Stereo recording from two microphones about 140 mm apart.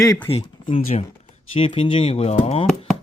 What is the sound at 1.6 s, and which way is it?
Speech, 40° left (ahead or behind).